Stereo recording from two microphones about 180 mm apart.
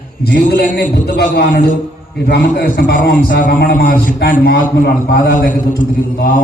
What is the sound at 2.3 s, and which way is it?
Speech, 70° left (ahead or behind).